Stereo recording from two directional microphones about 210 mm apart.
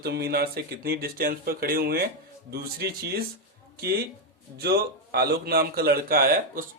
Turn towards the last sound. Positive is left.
turn(degrees=-45)  # may be behind; listen again after turning